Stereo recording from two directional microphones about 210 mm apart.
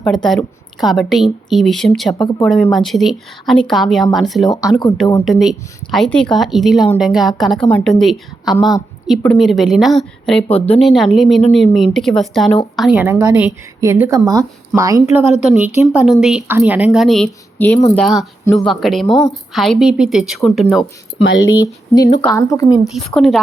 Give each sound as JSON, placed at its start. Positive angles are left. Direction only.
{"t": 0.0, "sound": "speech", "side_deg": 0}
{"t": 4.4, "sound": "speech", "side_deg": 15}
{"t": 5.2, "sound": "a woman's voice", "side_deg": 0}
{"t": 21.5, "sound": "speech", "side_deg": 20}
{"t": 22.8, "sound": "speech", "side_deg": 0}